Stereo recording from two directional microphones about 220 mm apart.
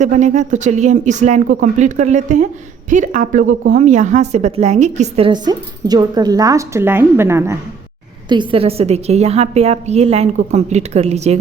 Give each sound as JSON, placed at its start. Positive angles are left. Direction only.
{"t": 0.0, "sound": "a woman's voice", "side_deg": -35}